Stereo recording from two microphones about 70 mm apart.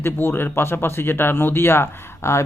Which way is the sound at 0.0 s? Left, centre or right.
Left.